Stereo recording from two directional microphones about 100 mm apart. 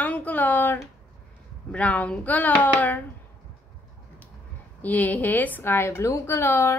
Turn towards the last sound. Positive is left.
turn(degrees=20)  # may be behind; listen again after turning